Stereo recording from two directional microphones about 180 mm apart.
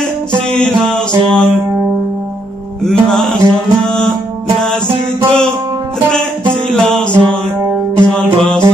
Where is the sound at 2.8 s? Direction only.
5° left (ahead or behind).